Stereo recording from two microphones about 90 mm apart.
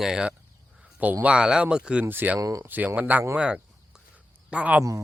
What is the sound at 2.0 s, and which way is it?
Speech, 20° right (ahead or behind).